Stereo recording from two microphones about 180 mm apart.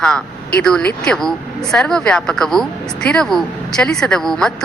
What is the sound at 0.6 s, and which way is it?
Speech, 5° left (ahead or behind).